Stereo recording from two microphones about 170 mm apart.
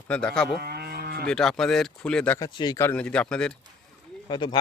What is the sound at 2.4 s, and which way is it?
Speech, 25° left (ahead or behind).